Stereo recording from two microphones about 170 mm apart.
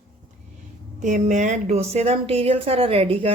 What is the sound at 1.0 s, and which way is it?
Speech, 45° right (ahead or behind).